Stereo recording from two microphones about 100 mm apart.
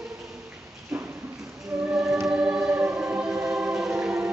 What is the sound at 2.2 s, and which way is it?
Choir, 10° right (ahead or behind).